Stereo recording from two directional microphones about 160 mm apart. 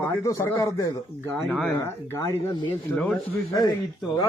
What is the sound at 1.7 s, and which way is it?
Speech, 15° left (ahead or behind).